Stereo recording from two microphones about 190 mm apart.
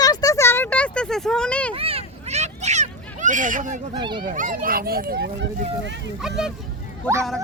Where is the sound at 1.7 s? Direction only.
30° right (ahead or behind).